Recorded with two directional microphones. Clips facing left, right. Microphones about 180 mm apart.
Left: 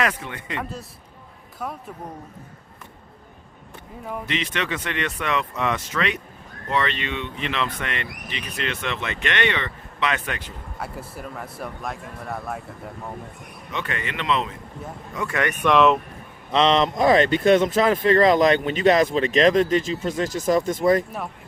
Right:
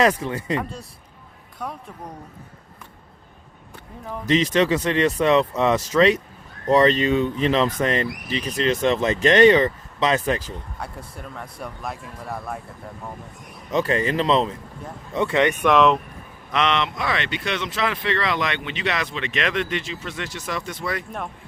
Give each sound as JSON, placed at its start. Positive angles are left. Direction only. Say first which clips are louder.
{"t": 0.0, "sound": "speech", "louder": "right 6 dB", "side_deg": -30}
{"t": 0.6, "sound": "speech", "louder": "even", "side_deg": 0}
{"t": 4.3, "sound": "speech", "louder": "right 10 dB", "side_deg": -35}
{"t": 10.8, "sound": "speech", "louder": "left 2 dB", "side_deg": 5}
{"t": 13.7, "sound": "speech", "louder": "right 9 dB", "side_deg": -35}
{"t": 15.7, "sound": "speech", "louder": "left 1 dB", "side_deg": 0}
{"t": 16.5, "sound": "speech", "louder": "left 4 dB", "side_deg": 30}